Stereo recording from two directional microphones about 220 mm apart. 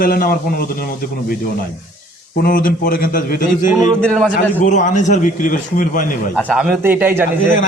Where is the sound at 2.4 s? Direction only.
40° left (ahead or behind).